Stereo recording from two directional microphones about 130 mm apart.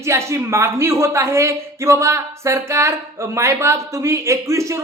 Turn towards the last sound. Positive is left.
turn(degrees=-25)  # may be behind; listen again after turning